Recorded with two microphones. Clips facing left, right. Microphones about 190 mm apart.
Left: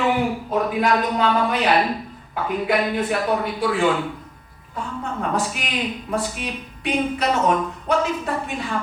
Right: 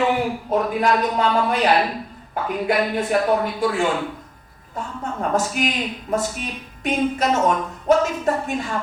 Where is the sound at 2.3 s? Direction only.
45° right (ahead or behind).